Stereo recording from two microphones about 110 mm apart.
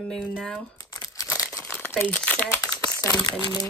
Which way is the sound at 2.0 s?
15° left (ahead or behind).